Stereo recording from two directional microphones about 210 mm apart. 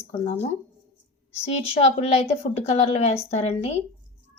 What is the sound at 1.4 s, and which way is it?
A woman's voice, 30° left (ahead or behind).